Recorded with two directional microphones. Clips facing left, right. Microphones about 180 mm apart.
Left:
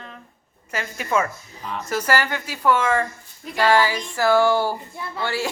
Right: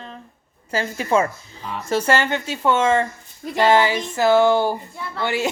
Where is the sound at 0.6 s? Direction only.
30° right (ahead or behind).